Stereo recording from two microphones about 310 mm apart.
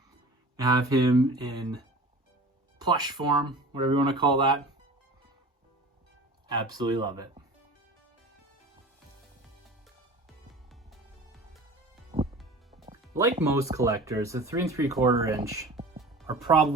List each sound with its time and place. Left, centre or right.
0.5 s speech: centre
6.5 s speech: centre
10.2 s music: centre
12.1 s music: centre
13.4 s speech: centre